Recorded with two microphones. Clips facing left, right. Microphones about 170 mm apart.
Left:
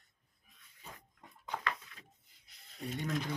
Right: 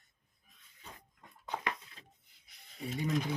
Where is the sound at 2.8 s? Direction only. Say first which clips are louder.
Right 3 dB; 5° right (ahead or behind).